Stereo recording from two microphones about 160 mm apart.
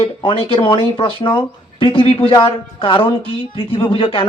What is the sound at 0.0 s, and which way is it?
Speech, 30° left (ahead or behind).